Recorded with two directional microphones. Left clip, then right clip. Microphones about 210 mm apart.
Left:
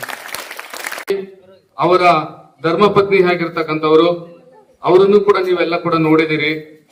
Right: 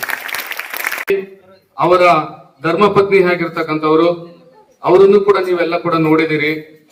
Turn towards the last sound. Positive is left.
turn(degrees=-50)  # may be behind; listen again after turning